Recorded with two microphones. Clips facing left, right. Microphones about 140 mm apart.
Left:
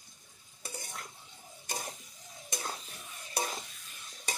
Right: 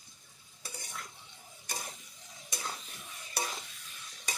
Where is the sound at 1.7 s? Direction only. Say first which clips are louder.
Left 3 dB; 20° left (ahead or behind).